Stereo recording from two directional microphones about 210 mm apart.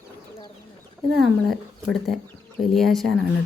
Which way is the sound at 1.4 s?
Centre (ahead or behind).